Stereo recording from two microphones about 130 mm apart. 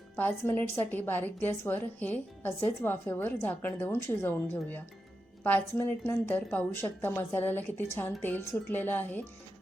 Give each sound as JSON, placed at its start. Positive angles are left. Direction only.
{"t": 0.2, "sound": "a woman's voice", "side_deg": 15}